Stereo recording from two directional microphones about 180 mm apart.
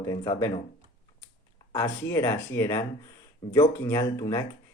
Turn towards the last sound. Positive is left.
turn(degrees=20)  # may be behind; listen again after turning